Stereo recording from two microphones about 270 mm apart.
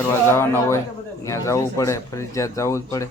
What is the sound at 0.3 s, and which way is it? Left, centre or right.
Speech, centre.